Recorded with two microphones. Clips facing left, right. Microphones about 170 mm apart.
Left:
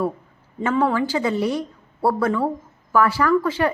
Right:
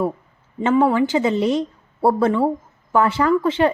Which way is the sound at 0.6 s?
25° right (ahead or behind).